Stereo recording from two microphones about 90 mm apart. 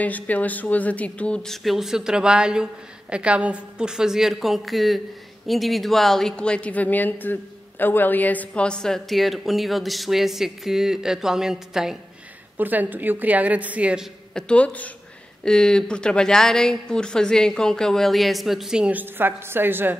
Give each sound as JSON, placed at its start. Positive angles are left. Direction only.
{"t": 0.0, "sound": "a woman's voice", "side_deg": 15}
{"t": 12.5, "sound": "a woman's voice", "side_deg": -20}
{"t": 14.3, "sound": "a woman's voice", "side_deg": 15}